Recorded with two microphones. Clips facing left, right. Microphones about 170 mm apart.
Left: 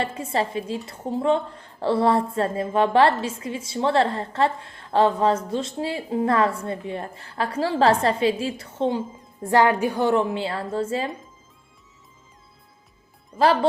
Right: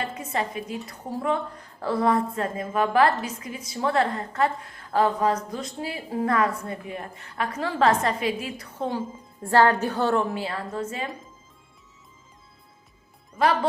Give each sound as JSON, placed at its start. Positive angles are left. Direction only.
{"t": 0.0, "sound": "a woman's voice", "side_deg": 30}
{"t": 13.3, "sound": "a woman's voice", "side_deg": 30}